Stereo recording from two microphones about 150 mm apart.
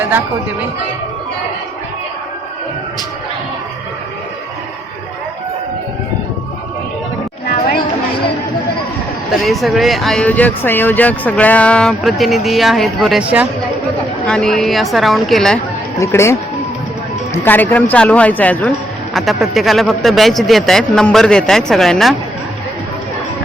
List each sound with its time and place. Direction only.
9.3 s speech: centre (ahead or behind)
14.3 s speech: 5° left (ahead or behind)
16.0 s speech: 20° left (ahead or behind)
17.4 s speech: 15° left (ahead or behind)
19.1 s speech: centre (ahead or behind)